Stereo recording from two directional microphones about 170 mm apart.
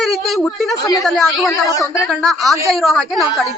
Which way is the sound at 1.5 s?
20° left (ahead or behind).